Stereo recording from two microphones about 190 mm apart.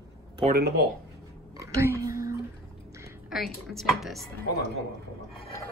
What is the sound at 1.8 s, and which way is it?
Whispering, 15° right (ahead or behind).